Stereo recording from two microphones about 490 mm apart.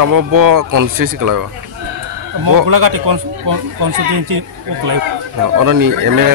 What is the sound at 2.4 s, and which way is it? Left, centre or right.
Speech, right.